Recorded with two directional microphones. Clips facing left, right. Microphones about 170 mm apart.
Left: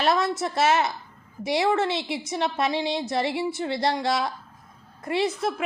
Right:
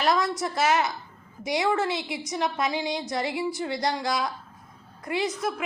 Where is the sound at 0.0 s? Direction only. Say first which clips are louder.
Left 1 dB; 25° left (ahead or behind).